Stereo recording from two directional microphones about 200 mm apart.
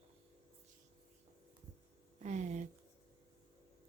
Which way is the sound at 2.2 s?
35° right (ahead or behind).